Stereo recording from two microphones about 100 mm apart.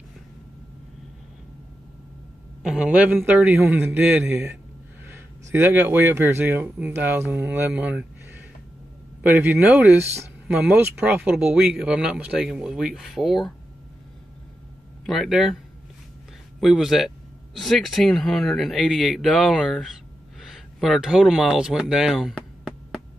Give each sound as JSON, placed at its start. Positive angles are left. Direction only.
{"t": 2.6, "sound": "speech", "side_deg": -5}
{"t": 3.3, "sound": "speech", "side_deg": -10}
{"t": 3.6, "sound": "speech", "side_deg": -20}
{"t": 9.2, "sound": "speech", "side_deg": -15}
{"t": 15.0, "sound": "a man's voice", "side_deg": 0}
{"t": 16.5, "sound": "a man's voice", "side_deg": 0}
{"t": 20.3, "sound": "a sound", "side_deg": 0}